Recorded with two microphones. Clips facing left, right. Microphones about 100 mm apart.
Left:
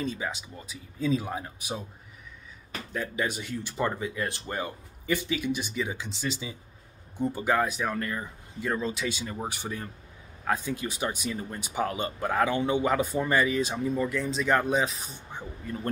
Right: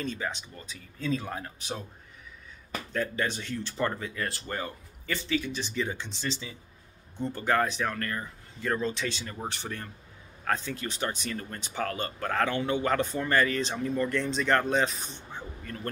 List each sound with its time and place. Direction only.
0.0 s speech: 10° left (ahead or behind)
2.9 s speech: 10° left (ahead or behind)
15.3 s speech: 15° left (ahead or behind)